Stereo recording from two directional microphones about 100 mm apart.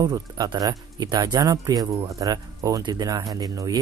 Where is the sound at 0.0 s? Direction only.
45° right (ahead or behind).